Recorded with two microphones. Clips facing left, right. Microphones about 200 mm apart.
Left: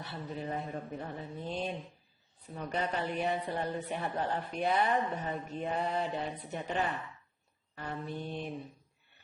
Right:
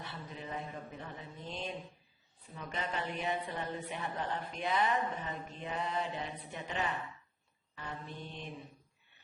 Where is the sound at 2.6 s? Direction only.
40° left (ahead or behind).